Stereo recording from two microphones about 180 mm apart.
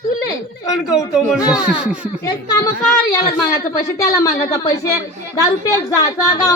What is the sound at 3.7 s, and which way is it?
A woman's voice, 15° left (ahead or behind).